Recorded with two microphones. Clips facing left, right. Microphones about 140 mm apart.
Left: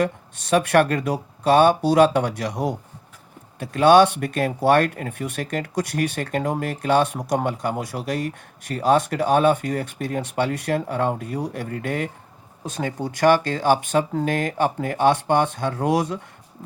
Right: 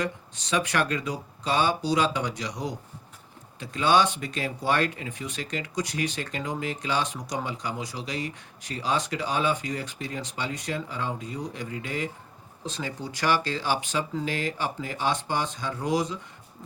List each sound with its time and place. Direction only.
0.0 s speech: 55° left (ahead or behind)